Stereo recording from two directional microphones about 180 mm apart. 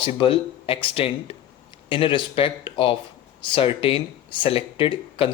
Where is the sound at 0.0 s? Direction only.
30° left (ahead or behind).